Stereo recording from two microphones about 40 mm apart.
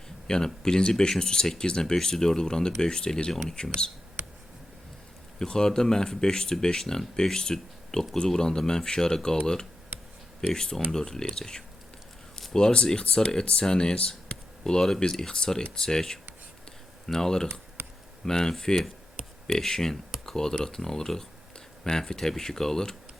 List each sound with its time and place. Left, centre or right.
0.3 s speech: centre
5.4 s speech: centre
14.6 s speech: centre